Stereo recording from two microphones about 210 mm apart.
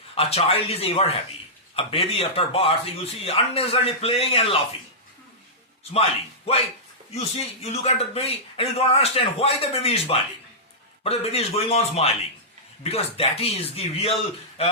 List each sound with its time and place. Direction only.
0.2 s a man's voice: 30° left (ahead or behind)
5.9 s a man's voice: 30° left (ahead or behind)